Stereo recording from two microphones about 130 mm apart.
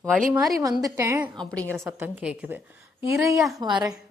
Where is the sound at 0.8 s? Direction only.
20° right (ahead or behind).